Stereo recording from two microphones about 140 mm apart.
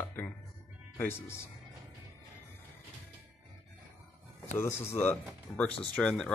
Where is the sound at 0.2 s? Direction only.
10° left (ahead or behind).